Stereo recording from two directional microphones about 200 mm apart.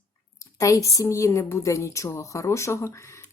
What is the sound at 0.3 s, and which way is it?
A woman's voice, 15° left (ahead or behind).